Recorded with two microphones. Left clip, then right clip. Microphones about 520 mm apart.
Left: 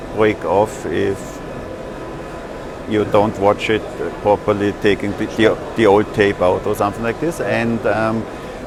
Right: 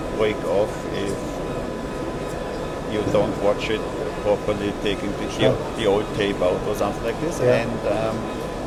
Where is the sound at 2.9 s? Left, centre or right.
Left.